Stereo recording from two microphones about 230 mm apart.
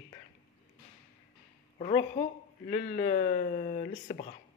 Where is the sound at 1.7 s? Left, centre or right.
Left.